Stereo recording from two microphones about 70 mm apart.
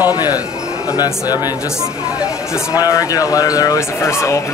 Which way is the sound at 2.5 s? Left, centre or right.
Left.